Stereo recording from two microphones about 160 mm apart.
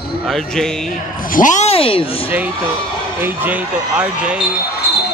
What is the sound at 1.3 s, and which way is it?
Speech, 55° left (ahead or behind).